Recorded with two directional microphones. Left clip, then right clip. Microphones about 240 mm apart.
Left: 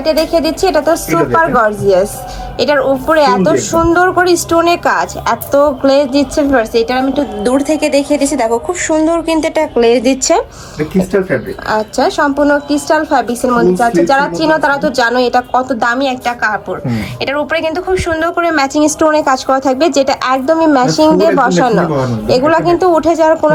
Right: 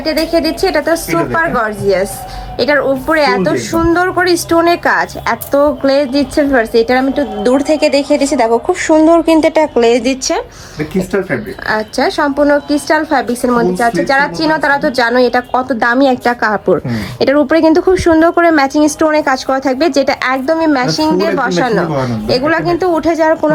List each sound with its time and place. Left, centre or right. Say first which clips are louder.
0.3 s a woman's voice: left 1 dB; centre
1.1 s a woman's voice: left 5 dB; centre